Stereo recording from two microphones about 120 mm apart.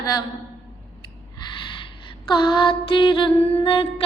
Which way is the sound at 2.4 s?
45° left (ahead or behind).